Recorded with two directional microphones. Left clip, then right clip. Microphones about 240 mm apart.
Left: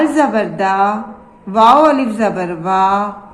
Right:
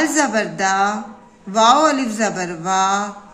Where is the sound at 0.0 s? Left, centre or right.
Right.